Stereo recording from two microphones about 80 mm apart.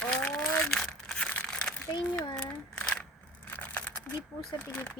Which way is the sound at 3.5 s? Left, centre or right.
Left.